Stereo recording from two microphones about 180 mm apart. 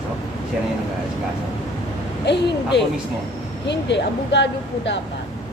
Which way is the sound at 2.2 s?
70° left (ahead or behind).